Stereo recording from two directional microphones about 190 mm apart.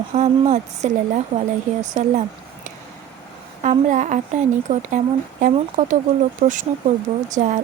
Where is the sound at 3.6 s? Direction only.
40° right (ahead or behind).